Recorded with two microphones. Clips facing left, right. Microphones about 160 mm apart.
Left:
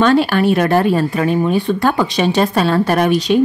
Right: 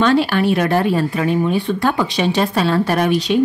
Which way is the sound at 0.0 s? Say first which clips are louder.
Left 2 dB; 45° left (ahead or behind).